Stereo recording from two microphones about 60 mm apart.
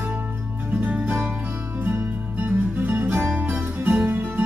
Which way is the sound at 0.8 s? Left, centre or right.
Right.